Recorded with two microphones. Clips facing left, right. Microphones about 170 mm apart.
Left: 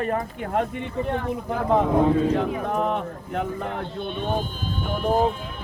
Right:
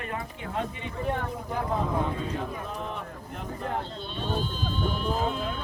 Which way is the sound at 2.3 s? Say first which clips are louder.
Left 10 dB; 80° left.